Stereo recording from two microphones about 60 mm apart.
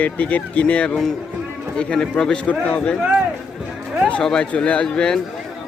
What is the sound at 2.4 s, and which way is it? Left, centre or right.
Speech, left.